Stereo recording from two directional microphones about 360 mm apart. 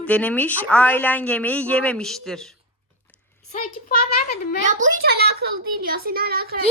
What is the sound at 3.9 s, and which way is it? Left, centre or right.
Speech, left.